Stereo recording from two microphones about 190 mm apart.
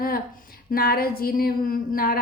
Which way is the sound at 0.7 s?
50° left (ahead or behind).